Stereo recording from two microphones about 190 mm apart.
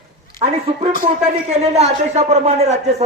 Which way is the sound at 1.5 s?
35° right (ahead or behind).